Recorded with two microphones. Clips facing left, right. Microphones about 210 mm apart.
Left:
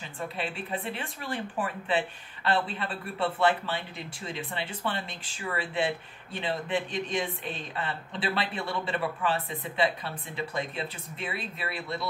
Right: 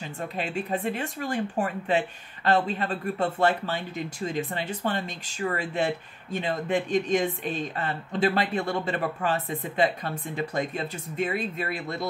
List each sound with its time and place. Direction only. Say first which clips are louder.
0.4 s speech: right 6 dB; 45° right (ahead or behind)